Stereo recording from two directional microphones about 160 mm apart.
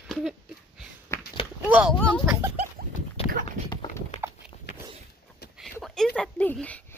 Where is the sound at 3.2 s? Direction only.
65° right (ahead or behind).